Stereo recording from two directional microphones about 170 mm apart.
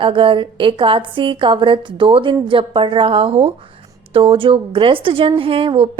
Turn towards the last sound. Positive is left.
turn(degrees=-30)  # may be behind; listen again after turning